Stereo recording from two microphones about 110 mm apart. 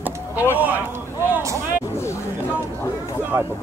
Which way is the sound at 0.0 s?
15° right (ahead or behind).